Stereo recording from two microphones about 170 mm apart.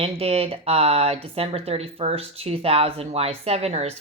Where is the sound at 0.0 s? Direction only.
35° right (ahead or behind).